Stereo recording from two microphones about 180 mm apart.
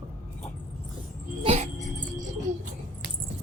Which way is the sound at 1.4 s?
35° right (ahead or behind).